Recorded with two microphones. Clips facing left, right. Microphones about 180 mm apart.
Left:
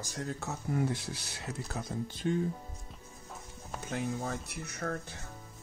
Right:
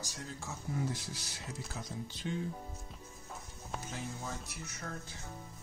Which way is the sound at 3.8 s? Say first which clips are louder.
Left 10 dB; 60° left (ahead or behind).